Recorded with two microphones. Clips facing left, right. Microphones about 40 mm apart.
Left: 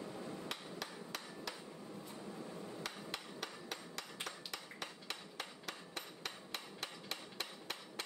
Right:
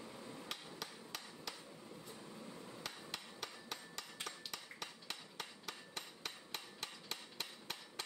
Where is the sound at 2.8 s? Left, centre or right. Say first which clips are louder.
Left 3 dB; centre.